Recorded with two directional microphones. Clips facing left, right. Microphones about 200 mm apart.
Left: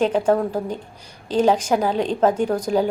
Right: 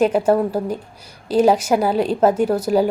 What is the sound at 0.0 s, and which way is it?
A woman's voice, 10° right (ahead or behind).